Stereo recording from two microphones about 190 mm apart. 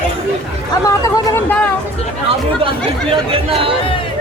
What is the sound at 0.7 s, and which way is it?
Speech, 15° left (ahead or behind).